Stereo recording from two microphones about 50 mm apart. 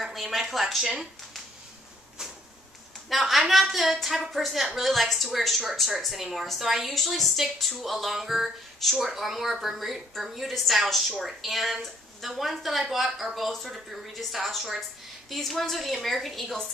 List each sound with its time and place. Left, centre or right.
0.0 s speech: centre
3.1 s a woman's voice: centre